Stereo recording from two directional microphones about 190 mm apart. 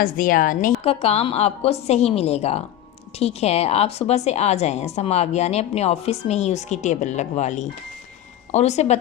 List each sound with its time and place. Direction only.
0.0 s a woman's voice: 45° left (ahead or behind)
0.9 s a woman's voice: 30° left (ahead or behind)